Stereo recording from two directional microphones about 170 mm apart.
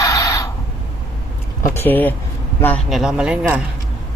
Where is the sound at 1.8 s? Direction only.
10° left (ahead or behind).